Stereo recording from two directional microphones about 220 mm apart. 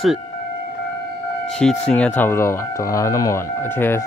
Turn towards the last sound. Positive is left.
turn(degrees=10)  # may be behind; listen again after turning